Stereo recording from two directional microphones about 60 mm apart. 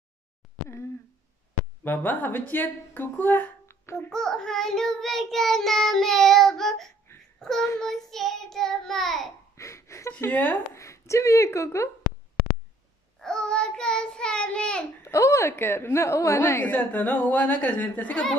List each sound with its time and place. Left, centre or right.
1.9 s a woman's voice: left
3.6 s babbling: left
4.1 s child singing: centre
7.3 s a child's voice: centre
7.8 s child singing: centre
9.6 s a sound: left
10.3 s a woman's voice: left
10.7 s speech: left
13.2 s child singing: centre
15.0 s speech: left
15.5 s a woman's voice: left
16.6 s a woman's voice: left